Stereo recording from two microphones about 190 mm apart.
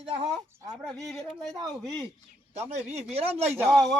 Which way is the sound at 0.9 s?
Centre (ahead or behind).